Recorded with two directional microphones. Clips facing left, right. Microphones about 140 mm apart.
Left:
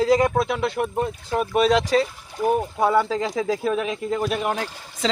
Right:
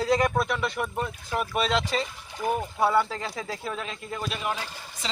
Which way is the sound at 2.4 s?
20° left (ahead or behind).